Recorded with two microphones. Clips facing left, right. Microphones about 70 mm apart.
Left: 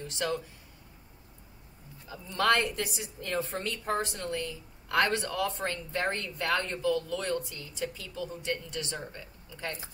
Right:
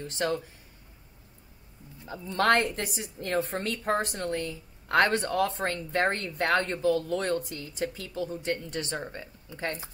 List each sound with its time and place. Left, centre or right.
0.0 s speech: right
2.0 s a woman's voice: right